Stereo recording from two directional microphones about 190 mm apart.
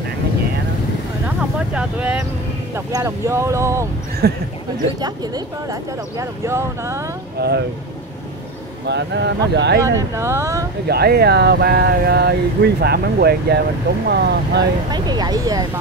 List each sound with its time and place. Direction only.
1.2 s vehicle: 5° right (ahead or behind)
2.7 s speech: 15° right (ahead or behind)
4.2 s a sound: 55° right (ahead or behind)
5.0 s speech: 20° right (ahead or behind)
7.3 s speech: 60° right (ahead or behind)
8.8 s a sound: 65° right (ahead or behind)
9.8 s speech: 15° right (ahead or behind)
10.9 s a sound: 55° right (ahead or behind)
14.9 s speech: 20° right (ahead or behind)